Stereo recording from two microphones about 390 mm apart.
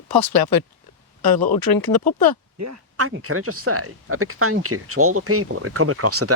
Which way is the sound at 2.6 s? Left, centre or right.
Right.